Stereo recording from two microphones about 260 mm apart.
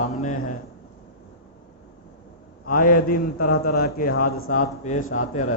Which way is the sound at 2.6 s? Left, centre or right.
Left.